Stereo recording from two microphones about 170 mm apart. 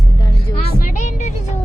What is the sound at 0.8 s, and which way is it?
Speech, 50° left (ahead or behind).